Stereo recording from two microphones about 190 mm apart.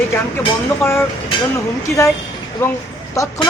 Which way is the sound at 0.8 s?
15° left (ahead or behind).